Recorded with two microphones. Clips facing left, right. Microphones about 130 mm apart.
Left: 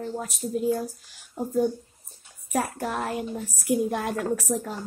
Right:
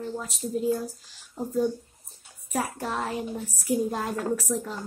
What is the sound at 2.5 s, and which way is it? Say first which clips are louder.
A woman's voice: left 2 dB; 55° left (ahead or behind).